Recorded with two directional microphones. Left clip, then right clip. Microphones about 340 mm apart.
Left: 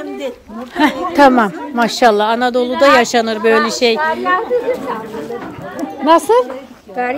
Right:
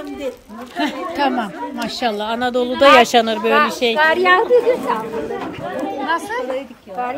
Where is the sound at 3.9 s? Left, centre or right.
Right.